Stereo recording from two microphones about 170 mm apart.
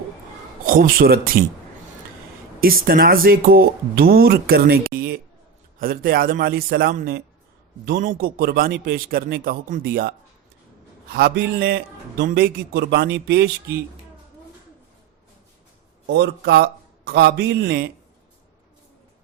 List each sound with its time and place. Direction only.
0.6 s speech: 55° right (ahead or behind)
2.6 s speech: 60° right (ahead or behind)
7.9 s a man's voice: 55° right (ahead or behind); by 13.5 s 70° right (ahead or behind)
16.0 s a man's voice: 75° right (ahead or behind)